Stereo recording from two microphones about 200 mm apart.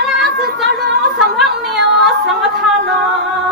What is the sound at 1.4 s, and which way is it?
Music, centre (ahead or behind).